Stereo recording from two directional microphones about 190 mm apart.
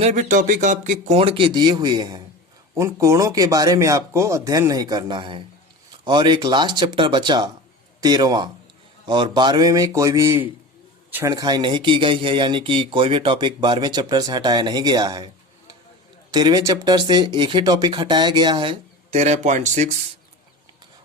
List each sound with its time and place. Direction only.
0.0 s speech: 40° right (ahead or behind); by 15.3 s 20° right (ahead or behind)
16.3 s speech: 20° right (ahead or behind); by 19.9 s 40° right (ahead or behind)